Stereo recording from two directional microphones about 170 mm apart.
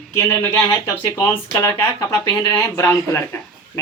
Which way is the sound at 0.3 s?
15° left (ahead or behind).